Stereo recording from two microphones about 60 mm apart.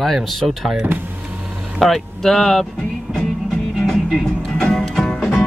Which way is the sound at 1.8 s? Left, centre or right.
Centre.